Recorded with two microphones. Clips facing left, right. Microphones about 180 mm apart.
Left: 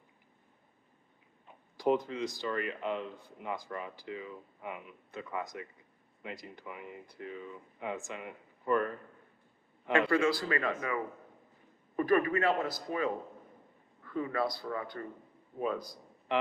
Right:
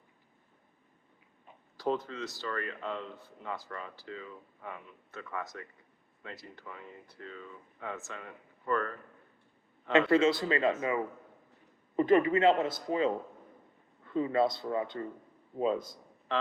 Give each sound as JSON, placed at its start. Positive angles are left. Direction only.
{"t": 1.8, "sound": "speech", "side_deg": 15}
{"t": 10.1, "sound": "a man's voice", "side_deg": -25}
{"t": 16.3, "sound": "speech", "side_deg": 15}